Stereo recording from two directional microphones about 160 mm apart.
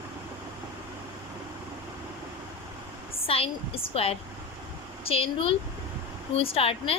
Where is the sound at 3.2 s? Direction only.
35° left (ahead or behind).